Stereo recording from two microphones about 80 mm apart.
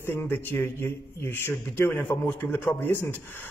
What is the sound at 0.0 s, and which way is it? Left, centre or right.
A man's voice, left.